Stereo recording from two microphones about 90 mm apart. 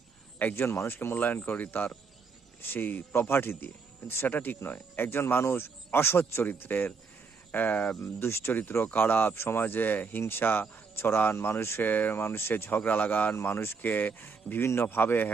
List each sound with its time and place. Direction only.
0.3 s a man's voice: 20° left (ahead or behind)
0.7 s speech: 30° left (ahead or behind)
0.9 s speech: 20° left (ahead or behind)